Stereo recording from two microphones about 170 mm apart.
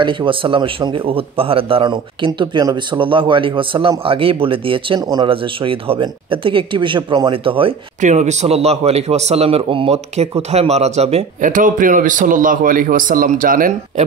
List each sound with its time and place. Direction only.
0.0 s speech: 30° right (ahead or behind)
8.0 s a man's voice: 45° right (ahead or behind)